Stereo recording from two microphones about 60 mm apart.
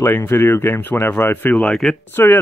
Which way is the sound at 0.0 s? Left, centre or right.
Left.